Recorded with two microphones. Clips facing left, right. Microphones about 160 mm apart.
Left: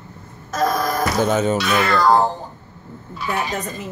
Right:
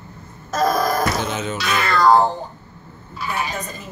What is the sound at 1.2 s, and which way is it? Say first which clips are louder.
Speech: left 7 dB; 45° left (ahead or behind).